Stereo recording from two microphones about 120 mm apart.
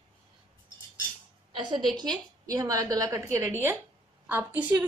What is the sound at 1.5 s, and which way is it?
A woman's voice, 40° right (ahead or behind).